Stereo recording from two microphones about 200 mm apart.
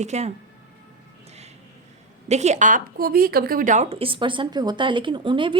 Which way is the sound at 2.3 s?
35° right (ahead or behind).